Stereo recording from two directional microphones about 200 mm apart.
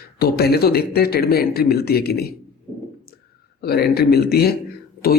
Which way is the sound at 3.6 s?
50° left (ahead or behind).